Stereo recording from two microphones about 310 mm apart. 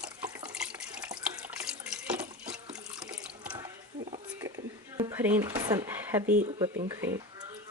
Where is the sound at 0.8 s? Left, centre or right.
Centre.